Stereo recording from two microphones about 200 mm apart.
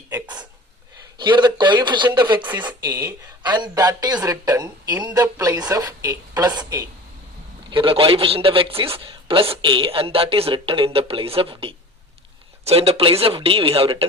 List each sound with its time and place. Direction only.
1.2 s a woman's voice: 20° right (ahead or behind)
2.5 s a woman's voice: 10° right (ahead or behind); by 14.0 s 25° right (ahead or behind)